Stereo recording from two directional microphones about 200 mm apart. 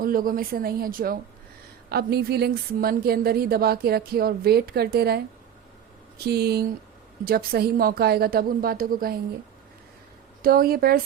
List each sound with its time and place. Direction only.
0.0 s a woman's voice: 45° right (ahead or behind)
6.2 s a woman's voice: 50° right (ahead or behind)
10.4 s a woman's voice: 45° right (ahead or behind)